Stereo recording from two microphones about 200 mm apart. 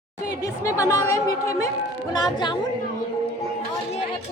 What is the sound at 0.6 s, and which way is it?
A woman's voice, 15° left (ahead or behind).